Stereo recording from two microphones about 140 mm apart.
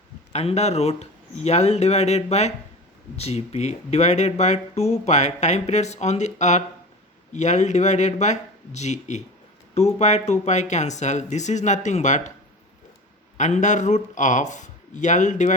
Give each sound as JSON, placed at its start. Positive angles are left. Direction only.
{"t": 0.3, "sound": "speech", "side_deg": 50}
{"t": 13.3, "sound": "speech", "side_deg": 60}